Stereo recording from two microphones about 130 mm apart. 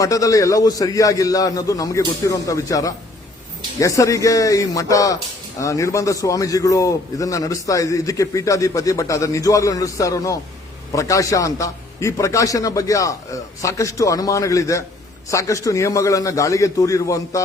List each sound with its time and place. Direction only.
0.0 s a man's voice: 25° left (ahead or behind)